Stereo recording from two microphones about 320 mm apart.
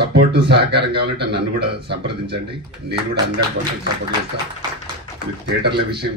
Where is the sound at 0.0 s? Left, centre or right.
Right.